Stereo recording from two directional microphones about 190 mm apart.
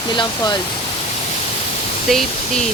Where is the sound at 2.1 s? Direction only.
Centre (ahead or behind).